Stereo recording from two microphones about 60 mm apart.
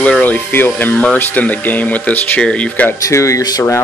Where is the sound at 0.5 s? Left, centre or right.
Left.